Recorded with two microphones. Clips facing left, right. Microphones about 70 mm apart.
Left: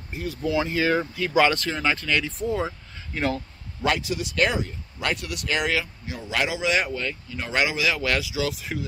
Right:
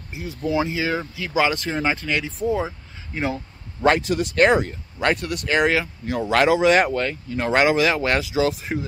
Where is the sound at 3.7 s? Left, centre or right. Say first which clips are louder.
Right 6 dB; right.